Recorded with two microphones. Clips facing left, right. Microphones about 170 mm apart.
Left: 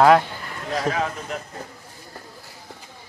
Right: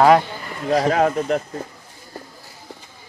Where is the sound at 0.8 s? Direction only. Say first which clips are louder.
Right 6 dB; 45° right (ahead or behind).